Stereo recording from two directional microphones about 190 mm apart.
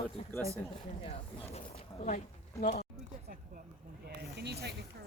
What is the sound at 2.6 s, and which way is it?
Speech, 55° left (ahead or behind).